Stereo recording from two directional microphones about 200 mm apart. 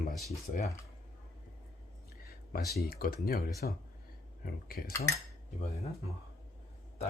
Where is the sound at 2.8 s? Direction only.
50° left (ahead or behind).